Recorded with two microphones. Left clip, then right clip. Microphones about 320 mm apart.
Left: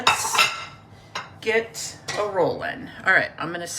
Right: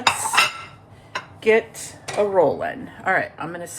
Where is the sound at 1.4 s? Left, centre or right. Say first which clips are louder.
Right 5 dB; centre.